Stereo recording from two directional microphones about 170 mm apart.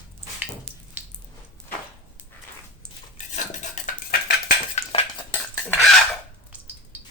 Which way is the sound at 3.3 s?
45° left (ahead or behind).